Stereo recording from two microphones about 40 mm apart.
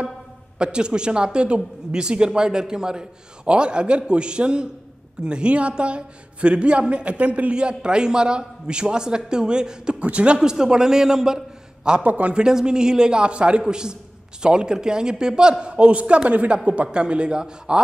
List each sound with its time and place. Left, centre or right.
0.6 s speech: right
7.5 s speech: right
9.9 s speech: right
10.4 s a man's voice: centre
12.0 s speech: right
12.4 s speech: centre